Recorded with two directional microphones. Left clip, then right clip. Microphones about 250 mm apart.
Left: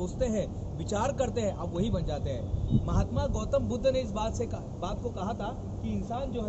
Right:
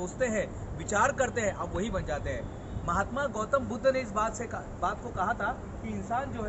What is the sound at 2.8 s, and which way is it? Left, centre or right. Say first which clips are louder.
A man's voice: right 7 dB; centre.